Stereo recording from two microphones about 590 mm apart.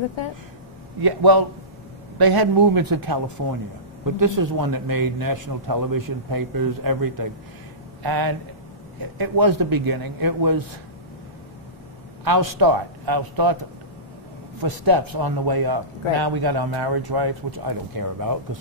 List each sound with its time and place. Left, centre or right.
1.0 s a man's voice: right
12.3 s a man's voice: right